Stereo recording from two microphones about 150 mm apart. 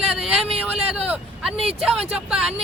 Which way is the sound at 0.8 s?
5° right (ahead or behind).